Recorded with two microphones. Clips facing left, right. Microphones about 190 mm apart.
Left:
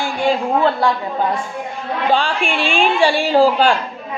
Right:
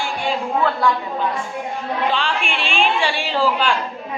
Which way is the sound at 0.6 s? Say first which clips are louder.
Right 1 dB; 30° left (ahead or behind).